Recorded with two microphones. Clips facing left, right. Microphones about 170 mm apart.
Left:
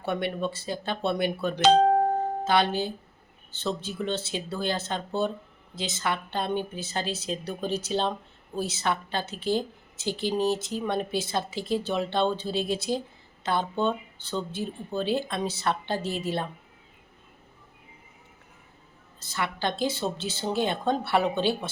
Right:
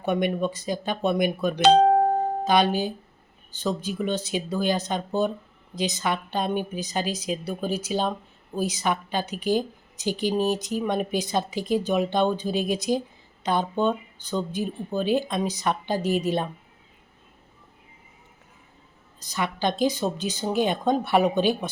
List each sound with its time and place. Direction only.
0.0 s a woman's voice: 15° right (ahead or behind)
1.6 s music: 5° right (ahead or behind)
2.4 s a woman's voice: 15° right (ahead or behind)
19.2 s a woman's voice: 15° right (ahead or behind)